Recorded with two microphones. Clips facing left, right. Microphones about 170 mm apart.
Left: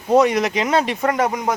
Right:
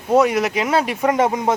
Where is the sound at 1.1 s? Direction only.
20° right (ahead or behind).